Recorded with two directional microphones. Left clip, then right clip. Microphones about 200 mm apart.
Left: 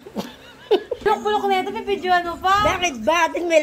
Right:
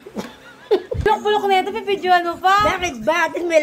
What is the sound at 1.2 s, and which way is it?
A woman's voice, 25° right (ahead or behind).